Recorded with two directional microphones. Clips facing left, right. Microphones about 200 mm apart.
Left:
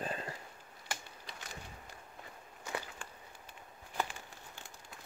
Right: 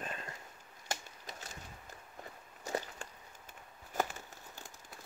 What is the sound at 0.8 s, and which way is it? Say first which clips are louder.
Typewriter: right 3 dB; 40° right (ahead or behind).